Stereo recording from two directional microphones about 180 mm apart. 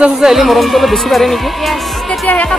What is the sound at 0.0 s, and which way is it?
Speech, centre (ahead or behind).